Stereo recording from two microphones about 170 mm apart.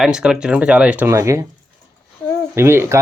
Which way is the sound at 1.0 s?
15° right (ahead or behind).